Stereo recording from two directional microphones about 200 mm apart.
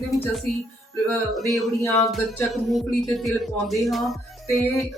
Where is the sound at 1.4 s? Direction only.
Centre (ahead or behind).